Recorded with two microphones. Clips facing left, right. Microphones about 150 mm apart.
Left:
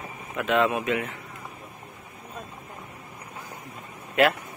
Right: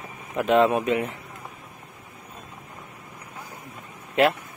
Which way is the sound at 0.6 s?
35° right (ahead or behind).